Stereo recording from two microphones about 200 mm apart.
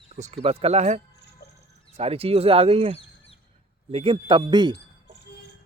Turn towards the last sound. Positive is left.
turn(degrees=-20)  # may be behind; listen again after turning